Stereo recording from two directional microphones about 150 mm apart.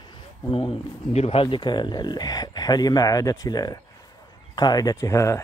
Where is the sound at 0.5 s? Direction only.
40° left (ahead or behind).